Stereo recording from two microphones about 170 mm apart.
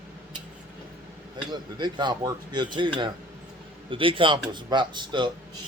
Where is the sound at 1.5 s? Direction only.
25° right (ahead or behind).